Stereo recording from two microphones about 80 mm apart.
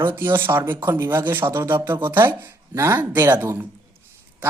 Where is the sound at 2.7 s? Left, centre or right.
Right.